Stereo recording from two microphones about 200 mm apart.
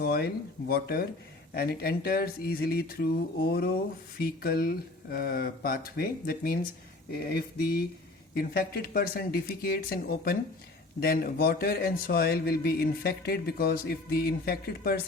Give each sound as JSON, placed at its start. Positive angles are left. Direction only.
{"t": 0.0, "sound": "a man's voice", "side_deg": 50}